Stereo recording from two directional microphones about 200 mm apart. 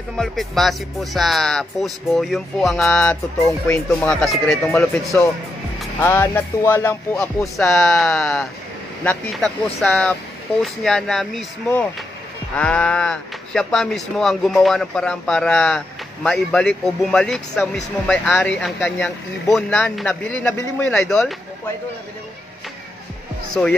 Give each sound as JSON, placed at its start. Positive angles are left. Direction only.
{"t": 0.2, "sound": "speech", "side_deg": 0}
{"t": 23.6, "sound": "speech", "side_deg": 5}